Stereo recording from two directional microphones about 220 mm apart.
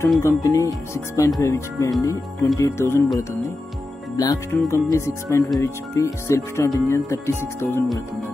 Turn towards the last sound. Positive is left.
turn(degrees=10)  # may be behind; listen again after turning